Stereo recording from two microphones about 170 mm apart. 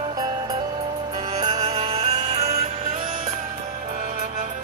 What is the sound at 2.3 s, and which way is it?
Music, 40° right (ahead or behind).